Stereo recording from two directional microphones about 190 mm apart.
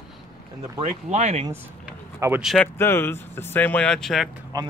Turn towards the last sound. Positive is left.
turn(degrees=-20)  # may be behind; listen again after turning